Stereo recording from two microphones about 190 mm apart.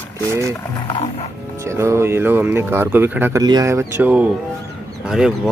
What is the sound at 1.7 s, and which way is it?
Speech, 15° right (ahead or behind).